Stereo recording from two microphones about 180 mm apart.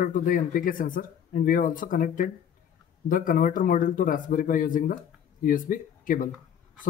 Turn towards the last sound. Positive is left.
turn(degrees=50)  # may be behind; listen again after turning